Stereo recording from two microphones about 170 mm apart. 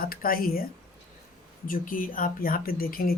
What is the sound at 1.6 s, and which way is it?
Speech, 55° left (ahead or behind).